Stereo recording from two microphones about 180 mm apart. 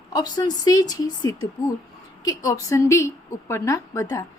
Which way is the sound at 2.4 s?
20° left (ahead or behind).